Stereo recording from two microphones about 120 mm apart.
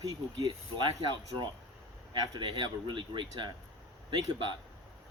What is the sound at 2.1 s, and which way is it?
Speech, 45° right (ahead or behind).